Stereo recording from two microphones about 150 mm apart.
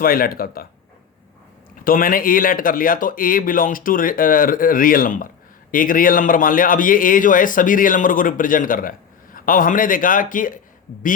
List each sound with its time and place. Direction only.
0.0 s speech: 75° left (ahead or behind)
1.8 s a man's voice: 70° left (ahead or behind)